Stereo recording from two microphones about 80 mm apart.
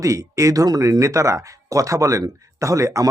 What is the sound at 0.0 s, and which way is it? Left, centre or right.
A man's voice, right.